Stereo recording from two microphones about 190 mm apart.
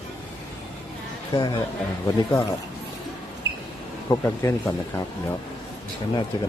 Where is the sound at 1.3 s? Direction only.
20° left (ahead or behind).